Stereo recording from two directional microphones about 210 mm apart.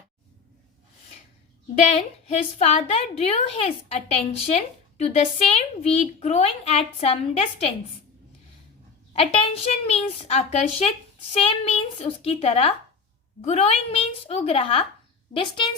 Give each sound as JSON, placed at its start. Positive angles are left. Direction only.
{"t": 1.7, "sound": "a woman's voice", "side_deg": 30}
{"t": 9.1, "sound": "a woman's voice", "side_deg": 30}